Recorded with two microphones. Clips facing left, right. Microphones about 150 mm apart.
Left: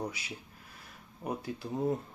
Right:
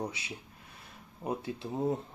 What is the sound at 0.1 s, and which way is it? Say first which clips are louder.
Speech: right 1 dB; 25° right (ahead or behind).